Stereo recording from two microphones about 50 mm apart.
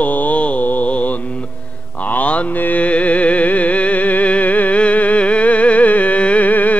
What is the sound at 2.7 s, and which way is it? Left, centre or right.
Music, left.